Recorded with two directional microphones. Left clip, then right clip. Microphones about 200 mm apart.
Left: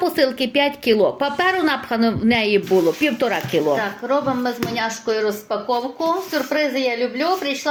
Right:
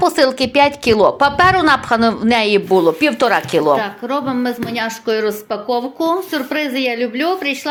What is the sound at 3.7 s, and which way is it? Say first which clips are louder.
Speech: right 2 dB; 40° right (ahead or behind).